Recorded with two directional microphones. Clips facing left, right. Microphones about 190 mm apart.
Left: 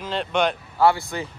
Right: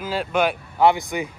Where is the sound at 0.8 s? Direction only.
20° right (ahead or behind).